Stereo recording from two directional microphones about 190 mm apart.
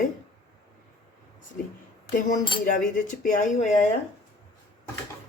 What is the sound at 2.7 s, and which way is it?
Speech, 45° left (ahead or behind).